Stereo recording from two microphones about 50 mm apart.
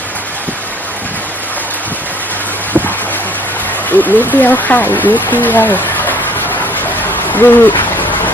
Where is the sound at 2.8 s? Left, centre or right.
Left.